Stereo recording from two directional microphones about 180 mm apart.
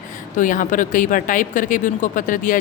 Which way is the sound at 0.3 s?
50° left (ahead or behind).